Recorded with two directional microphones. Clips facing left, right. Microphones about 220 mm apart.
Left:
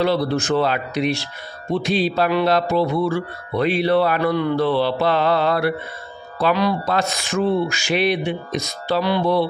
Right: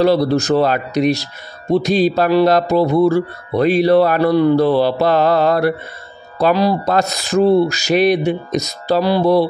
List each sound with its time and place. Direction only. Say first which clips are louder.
0.0 s speech: right 6 dB; 40° right (ahead or behind)